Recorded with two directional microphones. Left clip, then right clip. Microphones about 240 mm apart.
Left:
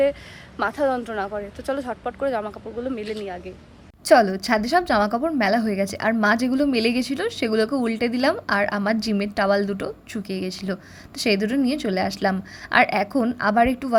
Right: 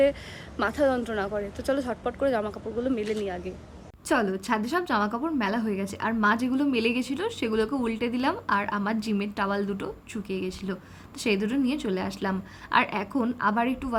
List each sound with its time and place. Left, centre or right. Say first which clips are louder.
0.0 s speech: left 2 dB; centre
4.0 s a woman's voice: left 10 dB; left